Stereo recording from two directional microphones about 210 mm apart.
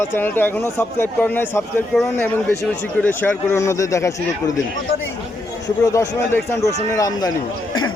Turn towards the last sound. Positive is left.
turn(degrees=15)  # may be behind; listen again after turning